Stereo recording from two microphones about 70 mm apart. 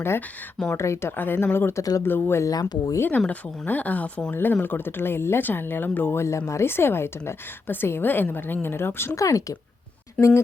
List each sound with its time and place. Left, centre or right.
0.8 s a woman's voice: left
1.1 s a woman's voice: left
1.8 s speech: left
2.0 s a woman's voice: left
2.4 s speech: left
3.0 s a woman's voice: left
9.1 s speech: left
10.2 s a woman's voice: left